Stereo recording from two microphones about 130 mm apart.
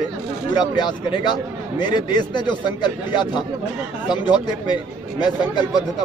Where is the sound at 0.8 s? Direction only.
35° left (ahead or behind).